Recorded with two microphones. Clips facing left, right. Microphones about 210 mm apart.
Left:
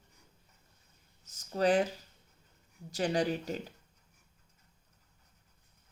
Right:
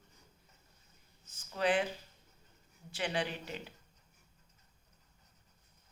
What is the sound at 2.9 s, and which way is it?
Speech, 40° left (ahead or behind).